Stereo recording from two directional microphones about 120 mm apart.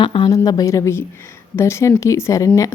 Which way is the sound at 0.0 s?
45° left (ahead or behind).